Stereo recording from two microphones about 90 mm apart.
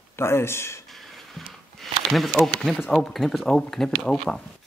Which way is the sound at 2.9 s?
Centre (ahead or behind).